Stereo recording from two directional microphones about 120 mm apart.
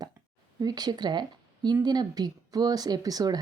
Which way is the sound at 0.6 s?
35° right (ahead or behind).